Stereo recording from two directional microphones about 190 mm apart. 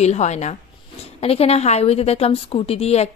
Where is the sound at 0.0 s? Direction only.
35° left (ahead or behind).